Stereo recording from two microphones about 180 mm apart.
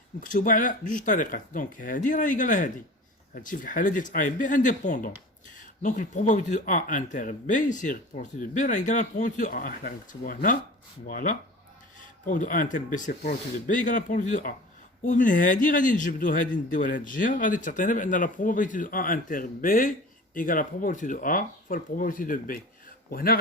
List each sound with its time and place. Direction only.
0.2 s a man's voice: 45° left (ahead or behind)